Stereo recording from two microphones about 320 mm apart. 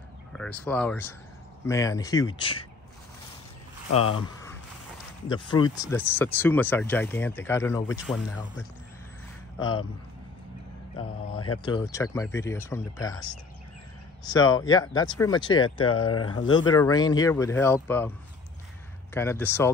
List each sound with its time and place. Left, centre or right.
0.3 s speech: centre
3.9 s speech: left
5.3 s speech: centre
9.6 s speech: centre
11.6 s speech: centre
15.8 s speech: left
16.5 s speech: centre
19.1 s speech: centre